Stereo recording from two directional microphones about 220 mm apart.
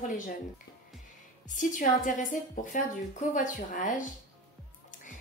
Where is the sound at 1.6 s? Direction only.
35° left (ahead or behind).